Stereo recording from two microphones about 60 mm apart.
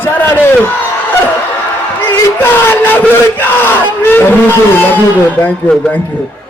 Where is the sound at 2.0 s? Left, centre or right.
Left.